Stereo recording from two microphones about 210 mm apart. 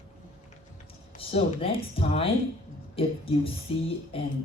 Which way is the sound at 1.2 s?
25° left (ahead or behind).